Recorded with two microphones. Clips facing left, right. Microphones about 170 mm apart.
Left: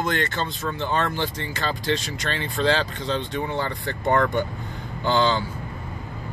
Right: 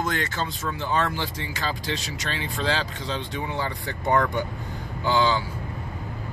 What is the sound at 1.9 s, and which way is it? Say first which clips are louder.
Speech: left 3 dB; 55° left (ahead or behind).